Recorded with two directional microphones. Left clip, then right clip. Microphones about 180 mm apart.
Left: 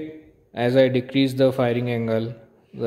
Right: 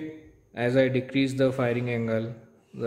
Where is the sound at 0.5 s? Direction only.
25° left (ahead or behind).